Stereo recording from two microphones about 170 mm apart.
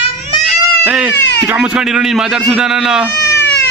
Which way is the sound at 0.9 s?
5° right (ahead or behind).